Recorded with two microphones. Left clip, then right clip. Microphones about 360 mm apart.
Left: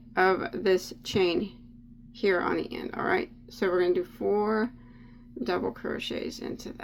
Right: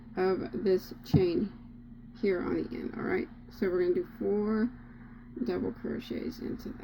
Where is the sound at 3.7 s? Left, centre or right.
Left.